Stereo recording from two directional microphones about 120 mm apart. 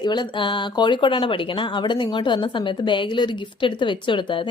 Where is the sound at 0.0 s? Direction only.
40° left (ahead or behind).